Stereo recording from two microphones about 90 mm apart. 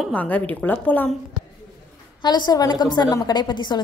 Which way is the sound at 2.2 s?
50° left (ahead or behind).